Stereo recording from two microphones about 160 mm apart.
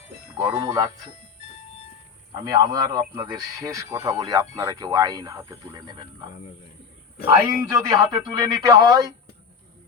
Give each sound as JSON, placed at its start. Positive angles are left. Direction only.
{"t": 0.6, "sound": "speech", "side_deg": -25}
{"t": 2.4, "sound": "speech", "side_deg": -25}
{"t": 7.4, "sound": "speech", "side_deg": -25}